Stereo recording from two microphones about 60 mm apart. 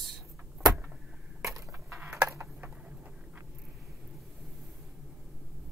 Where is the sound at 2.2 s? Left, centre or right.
Right.